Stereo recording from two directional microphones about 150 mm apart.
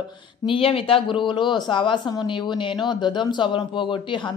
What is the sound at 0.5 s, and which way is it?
Speech, 40° left (ahead or behind).